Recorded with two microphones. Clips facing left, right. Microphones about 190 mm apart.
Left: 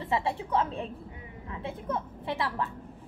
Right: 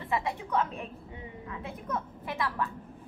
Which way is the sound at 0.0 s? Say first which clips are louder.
Left 2 dB; 30° left (ahead or behind).